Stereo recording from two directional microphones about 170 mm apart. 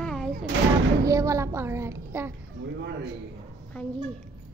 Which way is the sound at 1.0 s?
20° right (ahead or behind).